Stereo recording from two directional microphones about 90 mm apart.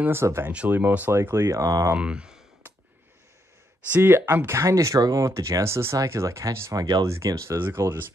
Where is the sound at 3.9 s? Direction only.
25° right (ahead or behind).